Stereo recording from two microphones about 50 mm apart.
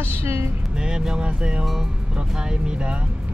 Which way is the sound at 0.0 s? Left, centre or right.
Right.